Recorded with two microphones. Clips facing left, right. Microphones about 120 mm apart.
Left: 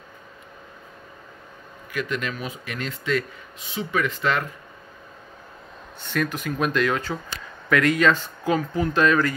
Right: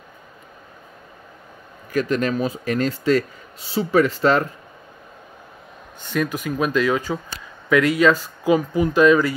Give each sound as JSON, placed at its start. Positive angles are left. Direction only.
{"t": 1.9, "sound": "speech", "side_deg": -40}
{"t": 6.0, "sound": "speech", "side_deg": -10}